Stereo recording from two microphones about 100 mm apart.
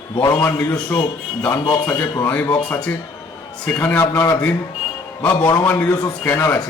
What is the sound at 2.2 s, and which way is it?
A man's voice, 15° left (ahead or behind).